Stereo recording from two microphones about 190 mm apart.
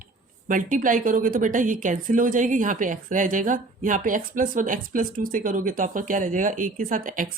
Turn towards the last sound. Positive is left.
turn(degrees=-45)  # may be behind; listen again after turning